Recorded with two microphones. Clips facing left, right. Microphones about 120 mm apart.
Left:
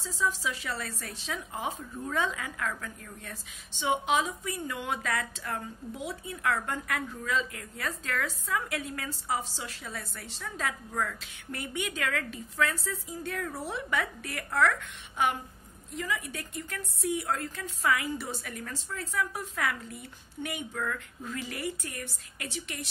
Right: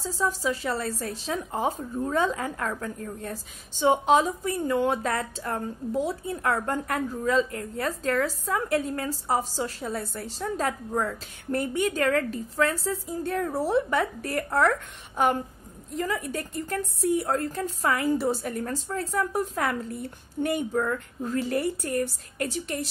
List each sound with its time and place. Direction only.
0.0 s speech: 40° right (ahead or behind)